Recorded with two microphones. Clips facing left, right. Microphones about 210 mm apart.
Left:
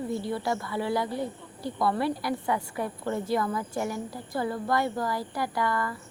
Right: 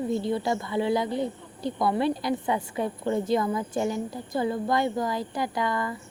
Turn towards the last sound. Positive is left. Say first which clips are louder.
# right 1 dB
turn(degrees=-20)  # may be behind; listen again after turning